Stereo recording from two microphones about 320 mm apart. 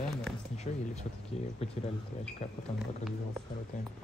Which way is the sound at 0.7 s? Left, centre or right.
Left.